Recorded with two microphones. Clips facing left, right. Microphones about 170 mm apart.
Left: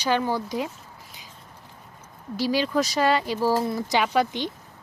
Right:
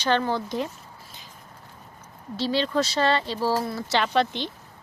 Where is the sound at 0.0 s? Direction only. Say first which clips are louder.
Even; 10° left (ahead or behind).